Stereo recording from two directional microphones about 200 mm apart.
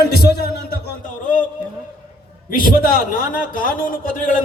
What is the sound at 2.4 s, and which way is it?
A man's voice, 45° left (ahead or behind).